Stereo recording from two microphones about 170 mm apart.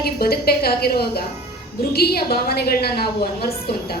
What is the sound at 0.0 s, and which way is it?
A woman's voice, 65° left (ahead or behind).